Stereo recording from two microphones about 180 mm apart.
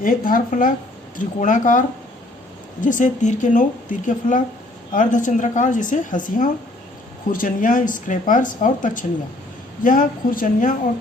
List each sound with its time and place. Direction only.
0.0 s speech: 50° left (ahead or behind)
2.8 s speech: 45° left (ahead or behind)